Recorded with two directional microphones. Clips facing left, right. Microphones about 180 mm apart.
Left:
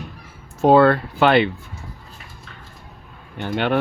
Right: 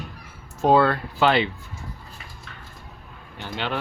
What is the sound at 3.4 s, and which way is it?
Speech, 55° left (ahead or behind).